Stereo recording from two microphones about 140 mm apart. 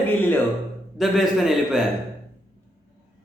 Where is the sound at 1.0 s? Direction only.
Centre (ahead or behind).